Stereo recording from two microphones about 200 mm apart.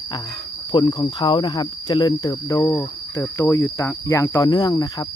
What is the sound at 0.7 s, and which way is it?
Speech, 25° left (ahead or behind).